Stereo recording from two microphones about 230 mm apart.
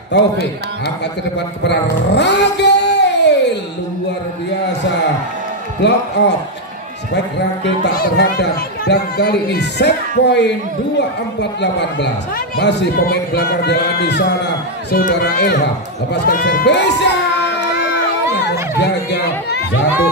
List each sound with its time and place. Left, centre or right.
0.1 s speech: left
1.7 s a sound: left
5.8 s speech: left
7.6 s speech: left
12.5 s speech: left
16.1 s crowd: left
18.3 s a sound: left